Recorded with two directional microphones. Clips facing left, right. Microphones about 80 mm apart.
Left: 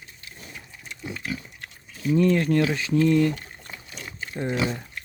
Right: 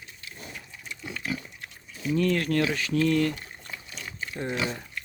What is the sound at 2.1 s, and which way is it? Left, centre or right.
Speech, left.